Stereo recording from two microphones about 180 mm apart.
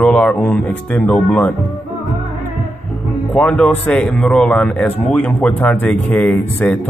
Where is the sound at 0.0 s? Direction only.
5° left (ahead or behind).